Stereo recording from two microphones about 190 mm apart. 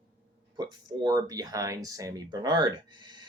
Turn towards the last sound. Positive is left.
turn(degrees=-25)  # may be behind; listen again after turning